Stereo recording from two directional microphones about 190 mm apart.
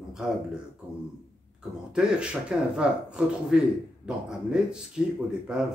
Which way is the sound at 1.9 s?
5° right (ahead or behind).